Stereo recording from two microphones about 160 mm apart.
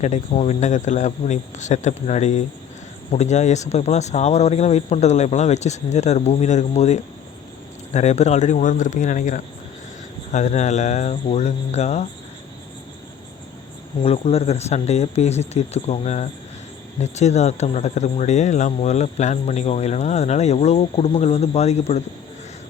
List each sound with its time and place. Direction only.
0.0 s speech: 45° left (ahead or behind)
14.0 s speech: 40° left (ahead or behind)